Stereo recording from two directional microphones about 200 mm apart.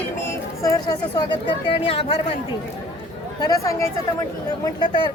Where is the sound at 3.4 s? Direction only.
15° left (ahead or behind).